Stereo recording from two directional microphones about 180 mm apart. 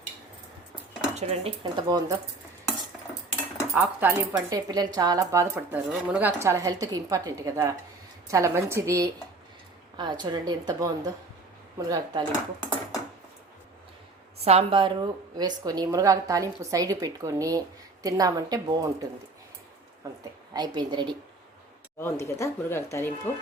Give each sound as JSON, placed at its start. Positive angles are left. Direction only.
{"t": 1.1, "sound": "a woman's voice", "side_deg": -35}
{"t": 3.8, "sound": "a woman's voice", "side_deg": -10}
{"t": 4.5, "sound": "a woman's voice", "side_deg": -20}
{"t": 14.4, "sound": "a woman's voice", "side_deg": -35}
{"t": 20.5, "sound": "a woman's voice", "side_deg": -20}
{"t": 22.0, "sound": "speech", "side_deg": 15}